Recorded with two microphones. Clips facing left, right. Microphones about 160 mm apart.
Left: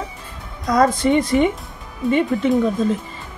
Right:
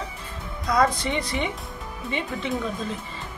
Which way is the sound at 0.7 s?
45° left (ahead or behind).